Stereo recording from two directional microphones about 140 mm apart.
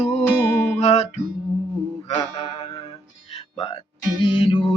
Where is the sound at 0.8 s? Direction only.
50° left (ahead or behind).